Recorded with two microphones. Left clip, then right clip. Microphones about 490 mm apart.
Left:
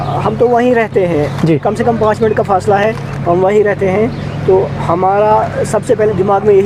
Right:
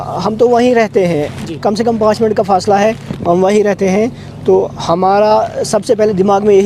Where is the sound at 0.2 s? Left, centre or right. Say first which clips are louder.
Right 1 dB; right.